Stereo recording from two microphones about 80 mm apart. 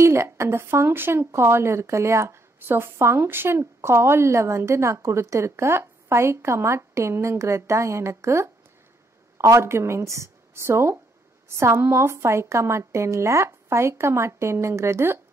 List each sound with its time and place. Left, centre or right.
0.0 s a woman's voice: right